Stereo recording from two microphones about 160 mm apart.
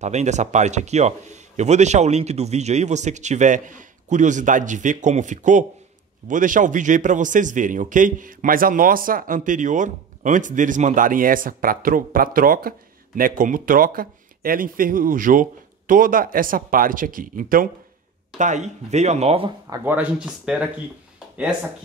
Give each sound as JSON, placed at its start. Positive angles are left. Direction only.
{"t": 0.0, "sound": "a man's voice", "side_deg": -45}
{"t": 18.4, "sound": "speech", "side_deg": -50}
{"t": 19.8, "sound": "speech", "side_deg": -10}